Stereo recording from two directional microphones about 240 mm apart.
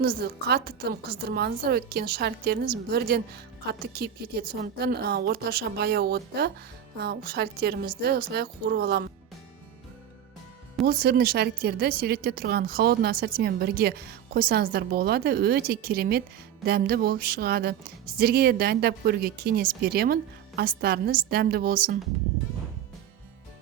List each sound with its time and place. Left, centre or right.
0.0 s speech: right
10.8 s speech: right